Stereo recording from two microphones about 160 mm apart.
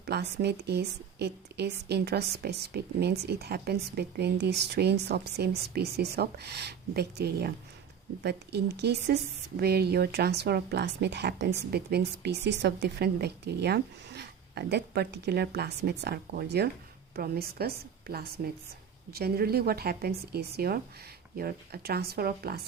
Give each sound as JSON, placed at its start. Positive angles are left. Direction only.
{"t": 0.0, "sound": "a woman's voice", "side_deg": -90}
{"t": 17.2, "sound": "a woman's voice", "side_deg": -75}